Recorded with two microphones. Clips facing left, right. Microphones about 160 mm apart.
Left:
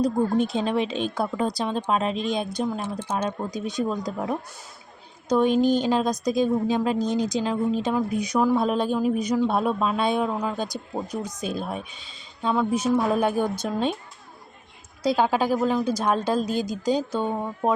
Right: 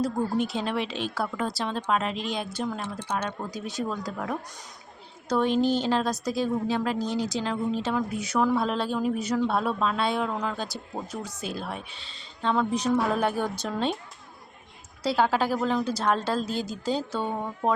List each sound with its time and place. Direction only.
0.4 s a woman's voice: 20° left (ahead or behind)
15.0 s a woman's voice: 15° left (ahead or behind)